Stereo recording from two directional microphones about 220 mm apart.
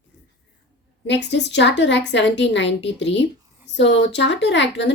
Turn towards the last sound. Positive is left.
turn(degrees=55)  # may be behind; listen again after turning